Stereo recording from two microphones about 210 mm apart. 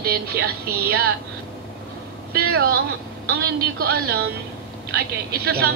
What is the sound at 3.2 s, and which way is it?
Speech, 50° right (ahead or behind).